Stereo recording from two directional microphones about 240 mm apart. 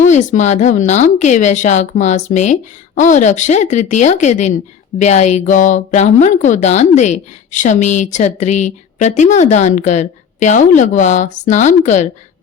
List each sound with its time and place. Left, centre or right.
0.1 s speech: left